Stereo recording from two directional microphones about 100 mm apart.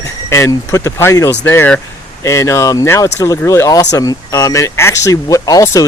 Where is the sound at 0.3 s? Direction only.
25° left (ahead or behind).